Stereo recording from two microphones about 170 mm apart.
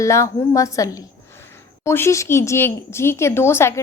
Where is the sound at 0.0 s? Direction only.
20° left (ahead or behind).